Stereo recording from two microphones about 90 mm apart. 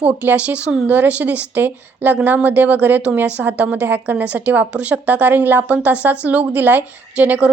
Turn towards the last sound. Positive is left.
turn(degrees=-15)  # may be behind; listen again after turning